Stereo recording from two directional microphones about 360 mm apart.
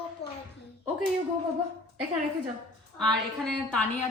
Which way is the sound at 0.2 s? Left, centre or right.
Left.